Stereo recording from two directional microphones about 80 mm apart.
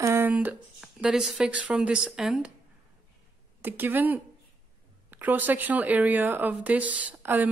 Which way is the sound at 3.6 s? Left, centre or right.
Right.